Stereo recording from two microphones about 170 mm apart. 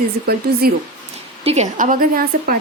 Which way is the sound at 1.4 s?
40° right (ahead or behind).